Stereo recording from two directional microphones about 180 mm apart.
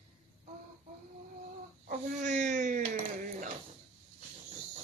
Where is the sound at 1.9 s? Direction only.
40° right (ahead or behind).